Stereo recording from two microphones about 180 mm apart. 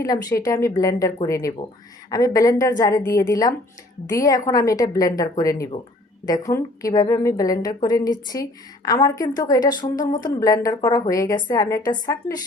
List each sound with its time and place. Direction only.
0.0 s a woman's voice: 20° left (ahead or behind)